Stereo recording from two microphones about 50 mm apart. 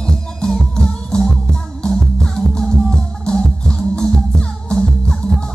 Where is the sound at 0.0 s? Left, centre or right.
Centre.